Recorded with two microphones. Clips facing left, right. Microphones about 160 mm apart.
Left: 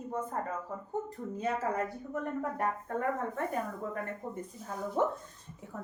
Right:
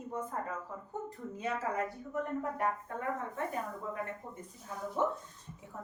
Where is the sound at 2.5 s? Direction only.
45° left (ahead or behind).